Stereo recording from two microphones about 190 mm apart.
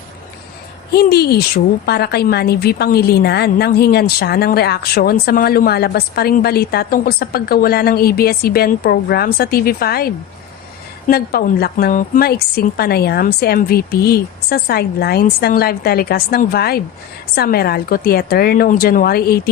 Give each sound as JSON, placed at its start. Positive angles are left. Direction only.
{"t": 0.9, "sound": "a woman's voice", "side_deg": 55}
{"t": 11.1, "sound": "a woman's voice", "side_deg": 55}